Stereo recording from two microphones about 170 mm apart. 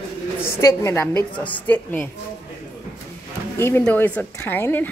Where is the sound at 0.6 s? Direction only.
15° left (ahead or behind).